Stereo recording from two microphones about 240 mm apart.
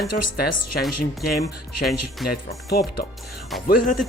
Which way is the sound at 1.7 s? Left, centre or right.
Left.